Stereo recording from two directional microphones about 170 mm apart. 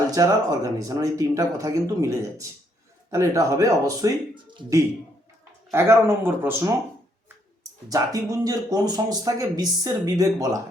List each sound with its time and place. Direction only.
0.1 s speech: 20° right (ahead or behind)
7.9 s speech: 20° right (ahead or behind)